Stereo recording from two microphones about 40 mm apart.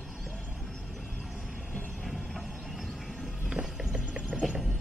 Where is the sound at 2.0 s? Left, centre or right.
Centre.